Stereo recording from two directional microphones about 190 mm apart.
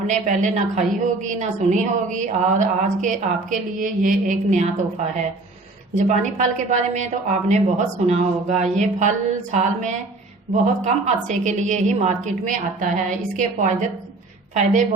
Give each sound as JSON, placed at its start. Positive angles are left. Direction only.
{"t": 0.1, "sound": "a woman's voice", "side_deg": -40}
{"t": 5.9, "sound": "a woman's voice", "side_deg": -35}